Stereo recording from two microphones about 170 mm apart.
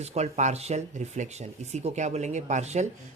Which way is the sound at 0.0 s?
40° right (ahead or behind).